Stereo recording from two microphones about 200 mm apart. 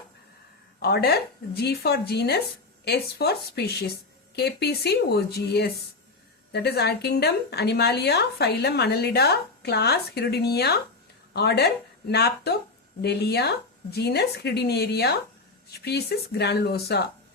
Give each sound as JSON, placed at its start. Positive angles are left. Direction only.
{"t": 0.8, "sound": "a woman's voice", "side_deg": 50}